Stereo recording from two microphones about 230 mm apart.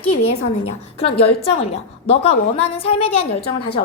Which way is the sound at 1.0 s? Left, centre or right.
Left.